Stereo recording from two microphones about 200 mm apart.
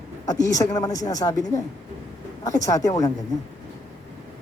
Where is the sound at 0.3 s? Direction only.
15° left (ahead or behind).